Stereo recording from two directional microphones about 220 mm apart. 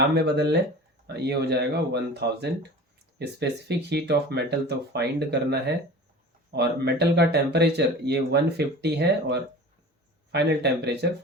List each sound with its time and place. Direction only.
0.1 s speech: 50° right (ahead or behind)